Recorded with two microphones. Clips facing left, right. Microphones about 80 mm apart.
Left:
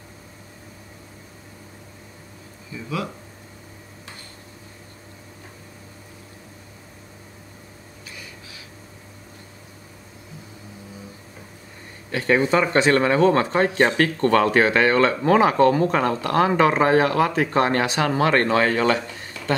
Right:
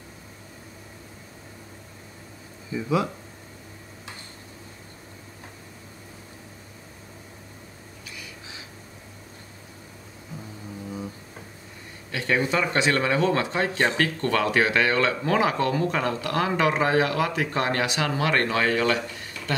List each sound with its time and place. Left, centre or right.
2.7 s speech: right
12.1 s speech: left